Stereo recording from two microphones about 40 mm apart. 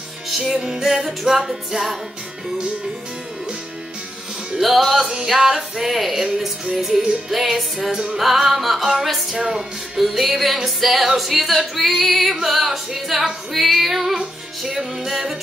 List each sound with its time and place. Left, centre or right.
0.3 s music: centre
4.6 s music: centre
6.1 s music: centre
7.2 s music: centre
7.9 s music: centre
8.2 s music: centre